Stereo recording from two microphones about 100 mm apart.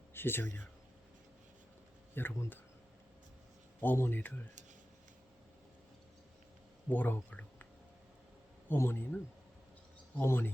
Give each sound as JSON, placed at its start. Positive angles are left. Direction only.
{"t": 0.1, "sound": "speech", "side_deg": 20}
{"t": 2.1, "sound": "speech", "side_deg": 20}
{"t": 3.8, "sound": "speech", "side_deg": 20}
{"t": 6.9, "sound": "speech", "side_deg": 15}
{"t": 8.7, "sound": "speech", "side_deg": 20}